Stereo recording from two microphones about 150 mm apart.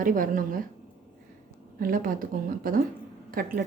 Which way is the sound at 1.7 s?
70° right (ahead or behind).